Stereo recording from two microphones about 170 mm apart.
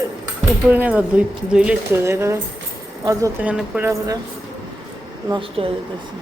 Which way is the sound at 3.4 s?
5° right (ahead or behind).